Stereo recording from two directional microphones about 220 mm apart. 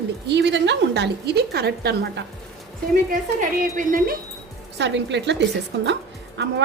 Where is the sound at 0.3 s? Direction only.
50° right (ahead or behind).